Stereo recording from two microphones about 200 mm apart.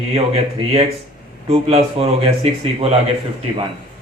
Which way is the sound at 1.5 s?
30° right (ahead or behind).